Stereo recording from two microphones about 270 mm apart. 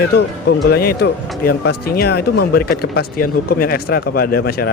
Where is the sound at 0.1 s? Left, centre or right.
Left.